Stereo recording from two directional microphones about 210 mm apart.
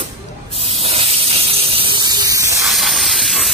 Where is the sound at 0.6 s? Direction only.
30° right (ahead or behind).